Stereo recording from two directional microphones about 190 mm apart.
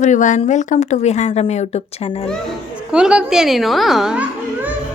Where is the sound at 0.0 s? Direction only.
40° left (ahead or behind).